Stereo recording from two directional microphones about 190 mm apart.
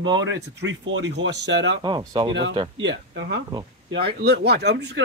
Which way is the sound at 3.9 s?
60° right (ahead or behind).